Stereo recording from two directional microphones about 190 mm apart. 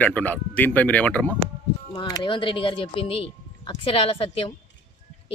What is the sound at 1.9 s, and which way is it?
Speech, 20° left (ahead or behind).